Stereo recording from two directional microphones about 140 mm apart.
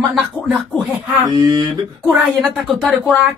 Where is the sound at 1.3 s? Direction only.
30° right (ahead or behind).